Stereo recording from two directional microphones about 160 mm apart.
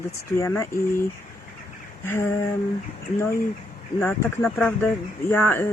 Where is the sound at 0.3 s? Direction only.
20° left (ahead or behind).